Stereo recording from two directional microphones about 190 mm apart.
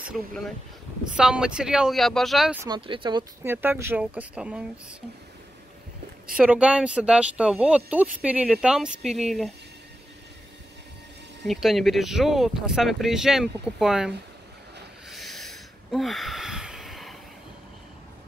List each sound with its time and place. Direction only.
1.1 s speech: 5° right (ahead or behind)
2.6 s speech: 25° right (ahead or behind)
3.4 s speech: 10° right (ahead or behind)
6.3 s speech: 5° right (ahead or behind)
11.4 s speech: centre (ahead or behind)
15.0 s a sound: centre (ahead or behind)